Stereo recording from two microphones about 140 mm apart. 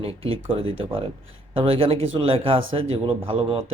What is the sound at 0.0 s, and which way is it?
Speech, 40° right (ahead or behind).